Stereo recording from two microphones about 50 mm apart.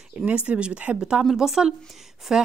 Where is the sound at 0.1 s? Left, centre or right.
Right.